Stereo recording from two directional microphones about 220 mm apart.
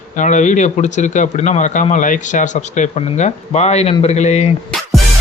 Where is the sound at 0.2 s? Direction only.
35° left (ahead or behind).